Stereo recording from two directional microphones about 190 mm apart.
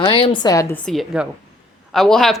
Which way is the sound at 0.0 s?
25° left (ahead or behind).